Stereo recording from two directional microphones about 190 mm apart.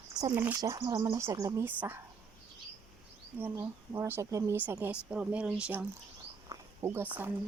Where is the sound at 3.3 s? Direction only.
15° right (ahead or behind).